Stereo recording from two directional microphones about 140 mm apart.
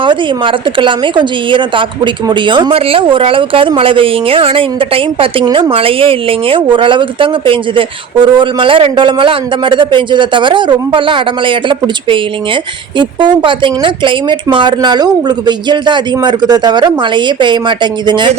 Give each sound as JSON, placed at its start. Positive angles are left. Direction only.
{"t": 0.0, "sound": "speech", "side_deg": -35}